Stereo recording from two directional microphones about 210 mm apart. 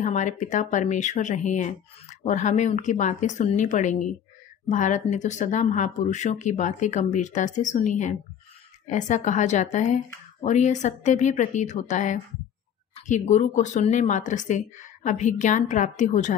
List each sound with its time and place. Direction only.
0.0 s speech: 35° left (ahead or behind)